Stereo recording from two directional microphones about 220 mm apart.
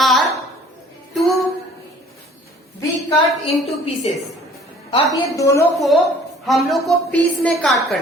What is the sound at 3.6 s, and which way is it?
Speech, 30° left (ahead or behind).